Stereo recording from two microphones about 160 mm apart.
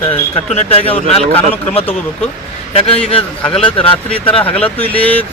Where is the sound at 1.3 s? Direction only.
35° left (ahead or behind).